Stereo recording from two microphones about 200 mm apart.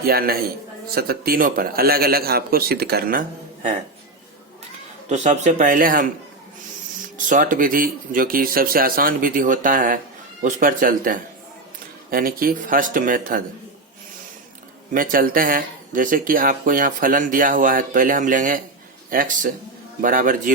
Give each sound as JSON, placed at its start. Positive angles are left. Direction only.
{"t": 0.0, "sound": "speech", "side_deg": -50}
{"t": 5.0, "sound": "a man's voice", "side_deg": -35}
{"t": 7.3, "sound": "speech", "side_deg": -40}
{"t": 14.9, "sound": "speech", "side_deg": -45}